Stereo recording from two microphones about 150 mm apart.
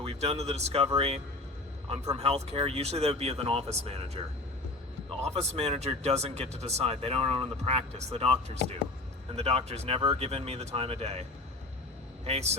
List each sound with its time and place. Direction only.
0.0 s speech: 45° right (ahead or behind)